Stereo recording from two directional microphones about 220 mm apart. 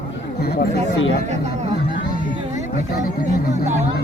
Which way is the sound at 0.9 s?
50° left (ahead or behind).